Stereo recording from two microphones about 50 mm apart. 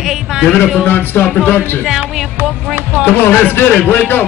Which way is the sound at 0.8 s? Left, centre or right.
Left.